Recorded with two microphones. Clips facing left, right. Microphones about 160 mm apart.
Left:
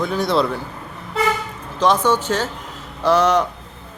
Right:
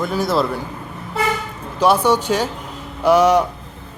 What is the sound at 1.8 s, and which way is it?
Speech, 10° right (ahead or behind).